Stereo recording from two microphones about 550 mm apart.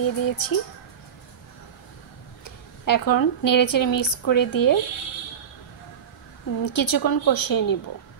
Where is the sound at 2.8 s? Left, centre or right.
Left.